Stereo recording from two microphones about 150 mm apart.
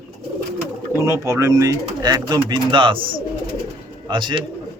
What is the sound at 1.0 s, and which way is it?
Speech, 20° right (ahead or behind).